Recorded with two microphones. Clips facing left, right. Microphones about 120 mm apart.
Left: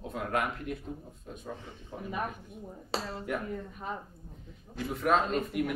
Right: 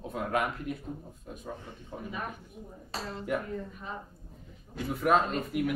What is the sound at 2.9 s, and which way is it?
Speech, 90° left.